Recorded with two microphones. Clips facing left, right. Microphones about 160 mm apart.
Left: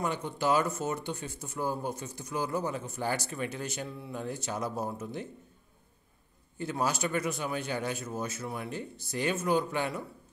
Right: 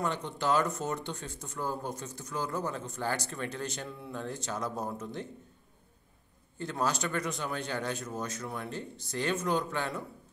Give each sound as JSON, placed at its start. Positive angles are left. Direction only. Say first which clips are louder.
{"t": 0.0, "sound": "speech", "louder": "left 1 dB", "side_deg": 10}
{"t": 6.6, "sound": "speech", "louder": "left 1 dB", "side_deg": 10}